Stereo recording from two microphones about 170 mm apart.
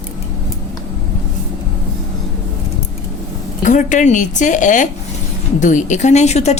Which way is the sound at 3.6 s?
45° left (ahead or behind).